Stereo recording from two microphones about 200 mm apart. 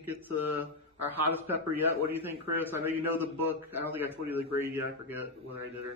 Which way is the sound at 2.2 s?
10° right (ahead or behind).